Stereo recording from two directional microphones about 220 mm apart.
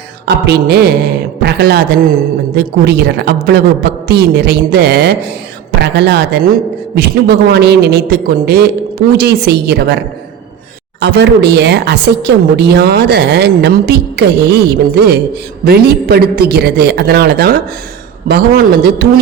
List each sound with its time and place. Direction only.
0.3 s a woman's voice: 50° right (ahead or behind)
11.0 s a woman's voice: 50° right (ahead or behind)